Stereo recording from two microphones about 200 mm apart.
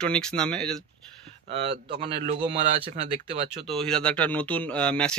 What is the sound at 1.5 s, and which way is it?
Speech, 30° right (ahead or behind).